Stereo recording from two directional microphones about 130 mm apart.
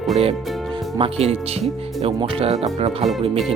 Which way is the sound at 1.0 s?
50° right (ahead or behind).